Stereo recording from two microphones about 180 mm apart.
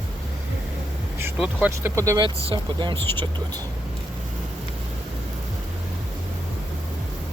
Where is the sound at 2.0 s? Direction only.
25° right (ahead or behind).